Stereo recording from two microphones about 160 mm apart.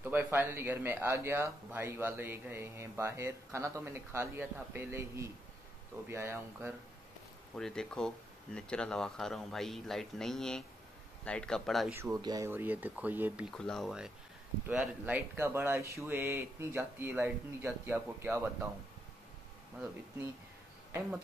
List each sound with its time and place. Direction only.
0.0 s speech: 10° right (ahead or behind)
7.5 s speech: 5° left (ahead or behind)
11.9 s speech: 20° right (ahead or behind)
12.4 s speech: 10° right (ahead or behind)
13.5 s speech: 5° left (ahead or behind); by 18.7 s 15° right (ahead or behind)